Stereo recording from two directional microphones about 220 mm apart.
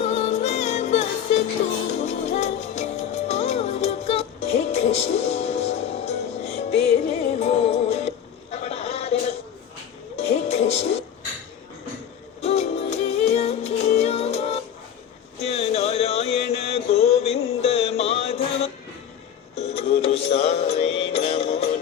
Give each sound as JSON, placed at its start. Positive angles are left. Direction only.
{"t": 0.0, "sound": "music", "side_deg": 30}
{"t": 8.5, "sound": "a sound", "side_deg": 30}
{"t": 10.2, "sound": "music", "side_deg": 30}
{"t": 12.4, "sound": "music", "side_deg": 30}